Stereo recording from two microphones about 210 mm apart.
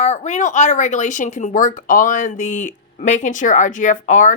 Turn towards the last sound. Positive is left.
turn(degrees=35)  # may be behind; listen again after turning